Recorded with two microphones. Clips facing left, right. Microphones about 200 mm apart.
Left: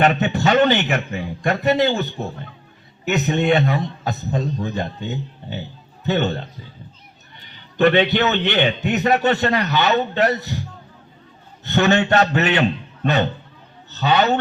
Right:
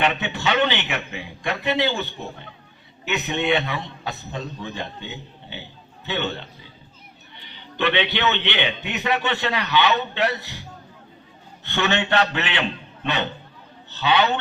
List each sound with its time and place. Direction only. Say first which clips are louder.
0.0 s a man's voice: left 6 dB; 45° left (ahead or behind)
11.6 s a man's voice: left 6 dB; 45° left (ahead or behind)